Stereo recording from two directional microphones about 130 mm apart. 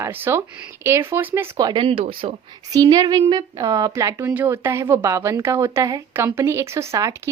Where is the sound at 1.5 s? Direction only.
35° right (ahead or behind).